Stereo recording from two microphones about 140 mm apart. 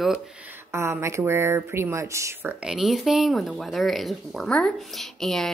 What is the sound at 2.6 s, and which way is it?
Speech, 5° right (ahead or behind).